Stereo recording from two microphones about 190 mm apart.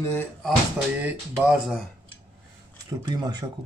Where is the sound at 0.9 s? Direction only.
5° right (ahead or behind).